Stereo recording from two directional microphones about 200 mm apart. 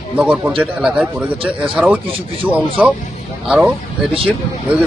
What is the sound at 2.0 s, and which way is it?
Speech, 25° right (ahead or behind).